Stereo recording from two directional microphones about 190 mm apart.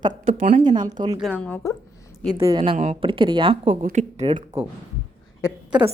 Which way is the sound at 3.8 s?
40° right (ahead or behind).